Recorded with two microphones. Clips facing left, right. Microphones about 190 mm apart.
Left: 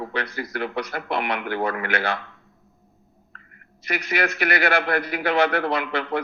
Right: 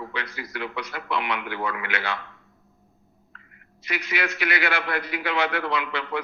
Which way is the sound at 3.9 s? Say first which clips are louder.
Left 4 dB; 40° left (ahead or behind).